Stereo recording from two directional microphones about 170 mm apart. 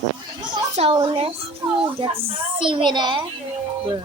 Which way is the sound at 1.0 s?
30° right (ahead or behind).